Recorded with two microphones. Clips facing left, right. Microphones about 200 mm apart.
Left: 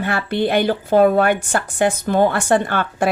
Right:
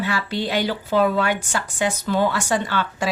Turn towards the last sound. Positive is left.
turn(degrees=55)  # may be behind; listen again after turning